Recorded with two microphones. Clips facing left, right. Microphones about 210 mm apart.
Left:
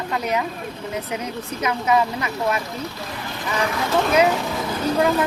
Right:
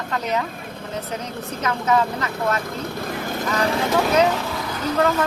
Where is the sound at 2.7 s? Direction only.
50° right (ahead or behind).